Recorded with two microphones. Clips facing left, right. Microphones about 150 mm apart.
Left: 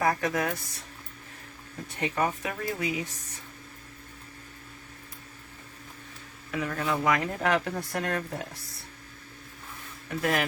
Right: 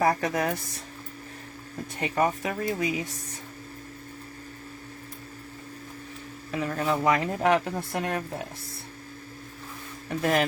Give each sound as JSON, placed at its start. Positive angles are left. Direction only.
{"t": 0.0, "sound": "speech", "side_deg": -35}
{"t": 2.0, "sound": "speech", "side_deg": -35}
{"t": 6.5, "sound": "speech", "side_deg": -30}
{"t": 10.1, "sound": "speech", "side_deg": -30}